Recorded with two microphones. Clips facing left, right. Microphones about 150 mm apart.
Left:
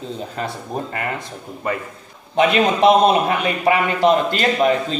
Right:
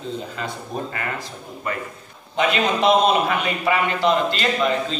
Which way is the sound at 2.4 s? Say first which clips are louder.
Left 5 dB; 50° left (ahead or behind).